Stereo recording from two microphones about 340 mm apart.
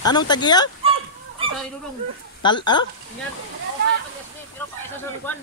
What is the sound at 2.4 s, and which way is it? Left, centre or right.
Speech, centre.